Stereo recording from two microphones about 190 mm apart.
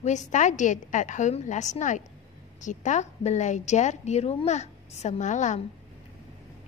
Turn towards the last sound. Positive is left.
turn(degrees=40)  # may be behind; listen again after turning